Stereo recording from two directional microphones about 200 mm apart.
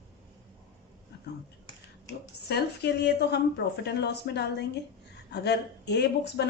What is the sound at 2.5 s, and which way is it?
Speech, 55° left (ahead or behind).